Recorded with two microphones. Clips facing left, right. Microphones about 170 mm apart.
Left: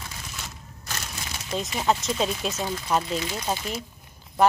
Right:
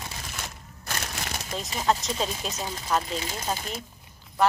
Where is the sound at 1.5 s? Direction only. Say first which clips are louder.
Left 6 dB; centre (ahead or behind).